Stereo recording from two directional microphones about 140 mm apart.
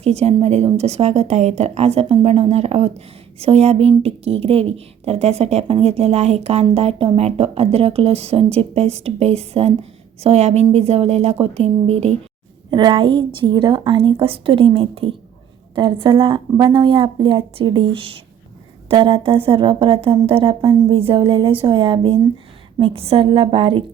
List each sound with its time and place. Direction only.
0.0 s speech: 50° right (ahead or behind)
12.7 s speech: 35° right (ahead or behind)